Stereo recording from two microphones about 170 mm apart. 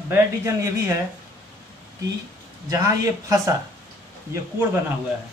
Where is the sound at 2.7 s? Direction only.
20° right (ahead or behind).